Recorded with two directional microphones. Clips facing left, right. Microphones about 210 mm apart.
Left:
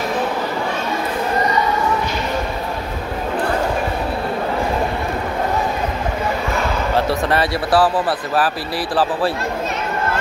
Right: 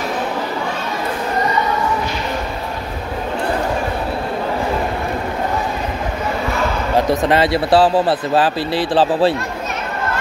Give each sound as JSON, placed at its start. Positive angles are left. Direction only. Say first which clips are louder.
{"t": 7.0, "sound": "speech", "louder": "right 4 dB", "side_deg": -20}